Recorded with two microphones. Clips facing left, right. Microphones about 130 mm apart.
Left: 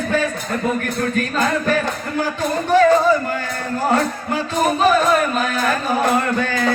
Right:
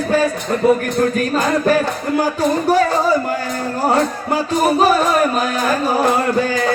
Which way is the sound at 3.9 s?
35° right (ahead or behind).